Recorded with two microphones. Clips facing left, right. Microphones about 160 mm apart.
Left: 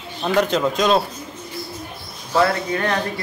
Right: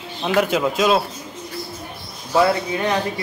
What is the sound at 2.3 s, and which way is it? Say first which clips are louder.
Speech: right 1 dB; 10° right (ahead or behind).